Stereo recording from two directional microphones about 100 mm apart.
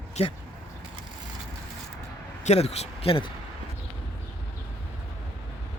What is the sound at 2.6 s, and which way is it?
Speech, 90° left.